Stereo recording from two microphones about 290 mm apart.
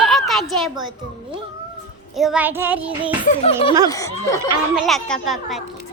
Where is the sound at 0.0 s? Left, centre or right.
Centre.